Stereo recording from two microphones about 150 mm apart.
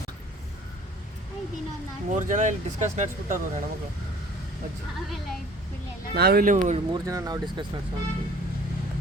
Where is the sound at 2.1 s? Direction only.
55° right (ahead or behind).